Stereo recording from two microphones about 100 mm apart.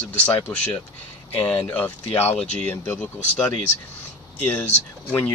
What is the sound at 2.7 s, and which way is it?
Speech, 20° left (ahead or behind).